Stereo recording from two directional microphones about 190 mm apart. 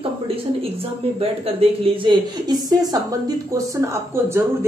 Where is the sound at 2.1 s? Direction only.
20° right (ahead or behind).